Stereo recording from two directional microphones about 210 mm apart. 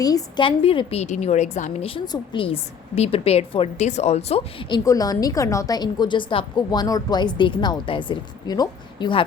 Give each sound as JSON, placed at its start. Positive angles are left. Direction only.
{"t": 0.0, "sound": "a woman's voice", "side_deg": 15}
{"t": 4.9, "sound": "a woman's voice", "side_deg": 15}